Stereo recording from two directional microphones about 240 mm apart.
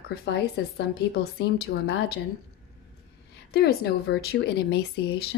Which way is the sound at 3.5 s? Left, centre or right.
Left.